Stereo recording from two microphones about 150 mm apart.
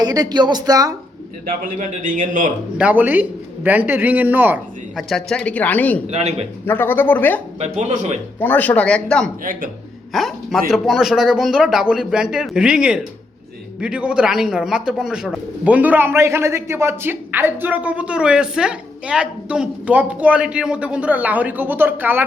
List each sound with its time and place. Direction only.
0.0 s speech: 25° right (ahead or behind)
1.5 s a man's voice: 65° right (ahead or behind)
2.7 s speech: 10° right (ahead or behind)
4.9 s speech: centre (ahead or behind)
6.1 s speech: 45° right (ahead or behind)
6.7 s speech: 15° left (ahead or behind)
7.6 s speech: 50° right (ahead or behind)
8.4 s speech: 10° left (ahead or behind)
9.4 s speech: 65° right (ahead or behind)
10.1 s a man's voice: centre (ahead or behind)